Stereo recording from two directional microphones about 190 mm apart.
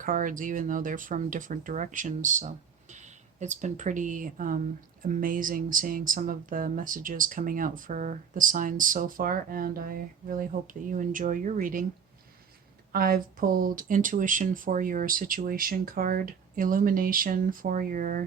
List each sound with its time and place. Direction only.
0.0 s speech: 45° right (ahead or behind)
12.9 s speech: 50° right (ahead or behind)